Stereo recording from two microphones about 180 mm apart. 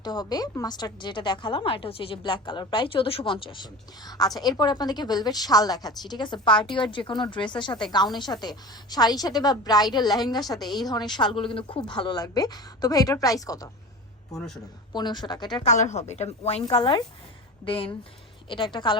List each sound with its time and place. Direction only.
0.0 s a woman's voice: 20° left (ahead or behind)
14.3 s a man's voice: 5° left (ahead or behind)
14.9 s a woman's voice: 25° left (ahead or behind)
15.6 s a woman's voice: 40° left (ahead or behind)